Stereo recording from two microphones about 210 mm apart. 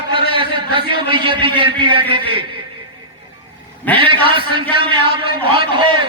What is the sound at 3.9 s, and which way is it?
A man's voice, 25° right (ahead or behind).